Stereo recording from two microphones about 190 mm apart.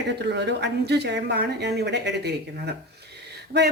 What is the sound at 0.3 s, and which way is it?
Speech, 65° right (ahead or behind).